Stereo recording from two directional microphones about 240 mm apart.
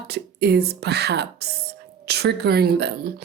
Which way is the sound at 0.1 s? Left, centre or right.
Right.